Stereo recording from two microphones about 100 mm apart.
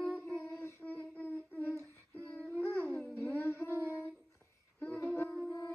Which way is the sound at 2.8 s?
5° left (ahead or behind).